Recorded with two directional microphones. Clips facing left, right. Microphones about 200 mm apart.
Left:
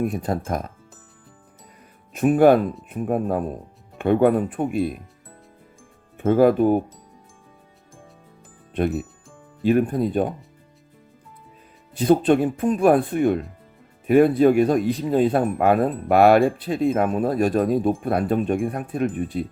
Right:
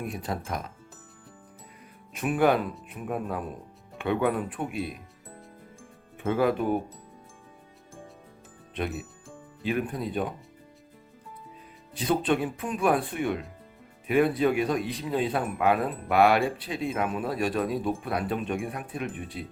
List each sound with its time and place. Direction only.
0.1 s speech: 45° left (ahead or behind)
2.1 s speech: 45° left (ahead or behind)
6.1 s speech: 50° left (ahead or behind)
9.6 s speech: 50° left (ahead or behind)
11.9 s speech: 45° left (ahead or behind)
19.1 s speech: centre (ahead or behind)